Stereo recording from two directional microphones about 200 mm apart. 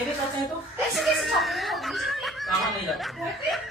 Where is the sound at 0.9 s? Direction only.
Centre (ahead or behind).